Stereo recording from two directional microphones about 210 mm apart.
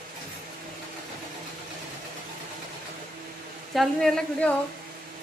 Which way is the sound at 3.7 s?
Centre (ahead or behind).